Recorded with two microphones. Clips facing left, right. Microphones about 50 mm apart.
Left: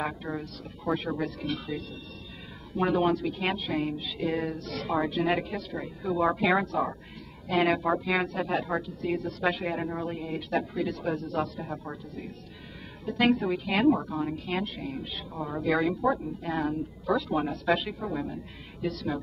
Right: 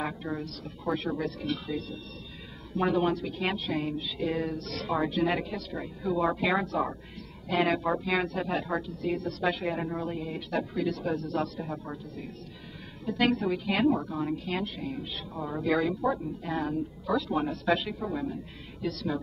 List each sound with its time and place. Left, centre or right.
0.0 s a woman's voice: centre
2.8 s a woman's voice: centre
13.0 s a woman's voice: centre